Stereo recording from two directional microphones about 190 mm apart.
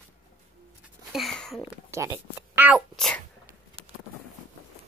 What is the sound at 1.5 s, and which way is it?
Sneeze, 15° right (ahead or behind).